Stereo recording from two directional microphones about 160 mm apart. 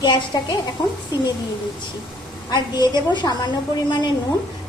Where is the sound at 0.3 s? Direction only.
25° left (ahead or behind).